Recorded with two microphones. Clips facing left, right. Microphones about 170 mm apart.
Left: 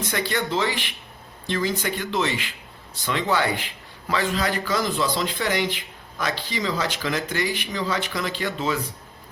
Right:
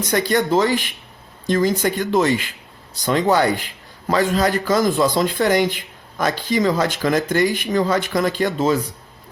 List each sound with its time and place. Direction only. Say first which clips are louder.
0.0 s a man's voice: right 7 dB; 40° right (ahead or behind)